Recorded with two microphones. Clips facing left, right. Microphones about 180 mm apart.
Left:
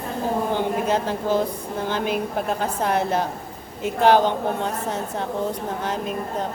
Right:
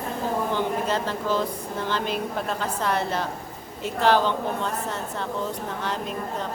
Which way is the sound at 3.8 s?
50° left (ahead or behind).